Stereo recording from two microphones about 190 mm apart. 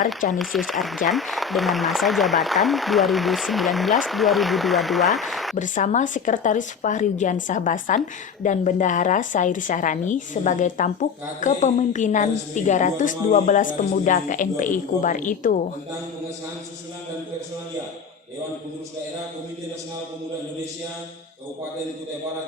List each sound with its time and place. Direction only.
0.3 s speech: centre (ahead or behind)
5.5 s a woman's voice: 40° left (ahead or behind)